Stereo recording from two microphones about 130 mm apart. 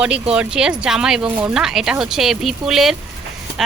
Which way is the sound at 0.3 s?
5° right (ahead or behind).